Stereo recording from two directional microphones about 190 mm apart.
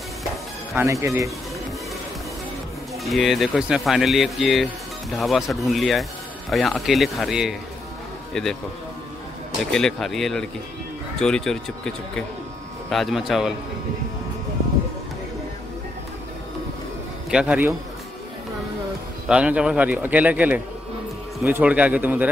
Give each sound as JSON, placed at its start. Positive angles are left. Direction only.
{"t": 0.7, "sound": "a man's voice", "side_deg": -15}
{"t": 3.0, "sound": "speech", "side_deg": 0}
{"t": 9.7, "sound": "speech", "side_deg": 5}
{"t": 17.3, "sound": "a man's voice", "side_deg": -5}
{"t": 19.2, "sound": "a man's voice", "side_deg": -5}